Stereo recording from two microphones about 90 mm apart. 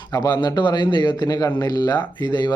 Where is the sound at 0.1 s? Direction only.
50° left (ahead or behind).